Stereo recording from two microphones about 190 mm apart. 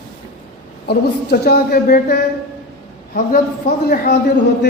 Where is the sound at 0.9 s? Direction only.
55° left (ahead or behind).